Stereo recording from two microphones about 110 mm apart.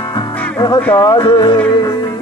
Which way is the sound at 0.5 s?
40° left (ahead or behind).